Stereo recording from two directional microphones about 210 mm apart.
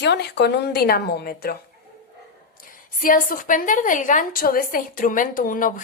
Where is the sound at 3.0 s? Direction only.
40° left (ahead or behind).